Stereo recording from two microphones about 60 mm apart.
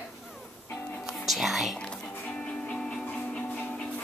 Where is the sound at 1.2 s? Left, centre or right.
Centre.